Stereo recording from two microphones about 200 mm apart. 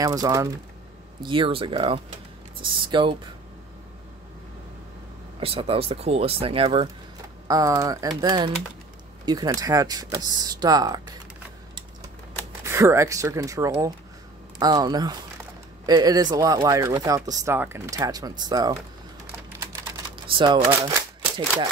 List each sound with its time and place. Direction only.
0.0 s speech: 20° right (ahead or behind)
5.4 s speech: 30° right (ahead or behind)
12.6 s speech: 15° right (ahead or behind)
20.2 s speech: 25° right (ahead or behind)